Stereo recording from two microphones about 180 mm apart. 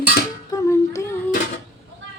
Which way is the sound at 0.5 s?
15° left (ahead or behind).